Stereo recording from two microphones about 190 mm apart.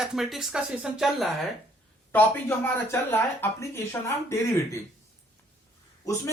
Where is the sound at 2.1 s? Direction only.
10° left (ahead or behind).